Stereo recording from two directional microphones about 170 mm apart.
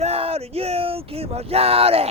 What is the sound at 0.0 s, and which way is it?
Speech, 35° right (ahead or behind).